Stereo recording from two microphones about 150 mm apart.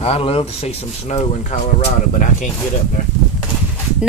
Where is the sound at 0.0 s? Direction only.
40° left (ahead or behind).